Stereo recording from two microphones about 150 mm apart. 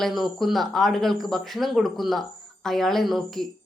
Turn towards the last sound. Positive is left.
turn(degrees=0)  # may be behind; listen again after turning